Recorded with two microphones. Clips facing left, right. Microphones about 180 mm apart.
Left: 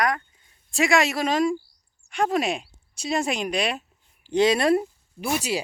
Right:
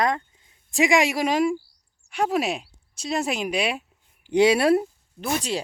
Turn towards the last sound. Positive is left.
turn(degrees=10)  # may be behind; listen again after turning